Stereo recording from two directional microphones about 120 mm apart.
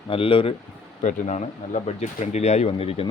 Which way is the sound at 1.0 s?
85° left.